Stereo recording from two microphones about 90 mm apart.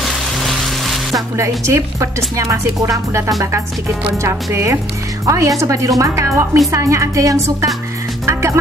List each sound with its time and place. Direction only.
0.0 s music: centre (ahead or behind)
1.1 s speech: 35° right (ahead or behind)
8.3 s music: 30° right (ahead or behind)